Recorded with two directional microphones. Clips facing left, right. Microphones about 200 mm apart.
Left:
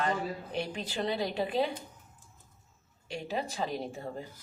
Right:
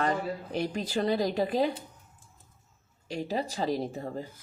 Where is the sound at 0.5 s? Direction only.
40° right (ahead or behind).